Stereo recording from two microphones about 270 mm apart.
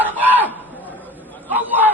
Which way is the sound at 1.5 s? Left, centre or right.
Centre.